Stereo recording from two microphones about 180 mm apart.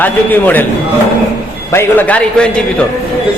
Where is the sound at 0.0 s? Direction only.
10° left (ahead or behind).